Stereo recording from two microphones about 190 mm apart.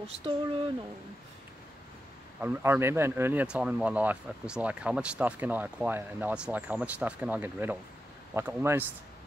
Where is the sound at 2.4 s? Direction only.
10° right (ahead or behind).